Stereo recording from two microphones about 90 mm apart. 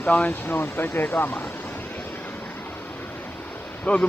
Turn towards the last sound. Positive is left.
turn(degrees=15)  # may be behind; listen again after turning